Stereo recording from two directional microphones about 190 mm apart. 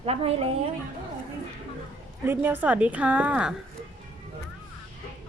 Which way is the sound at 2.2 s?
10° right (ahead or behind).